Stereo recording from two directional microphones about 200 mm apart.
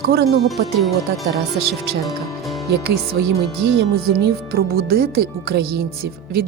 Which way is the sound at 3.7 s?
50° right (ahead or behind).